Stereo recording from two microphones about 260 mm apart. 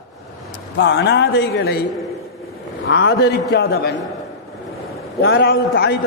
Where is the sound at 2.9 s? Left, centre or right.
Left.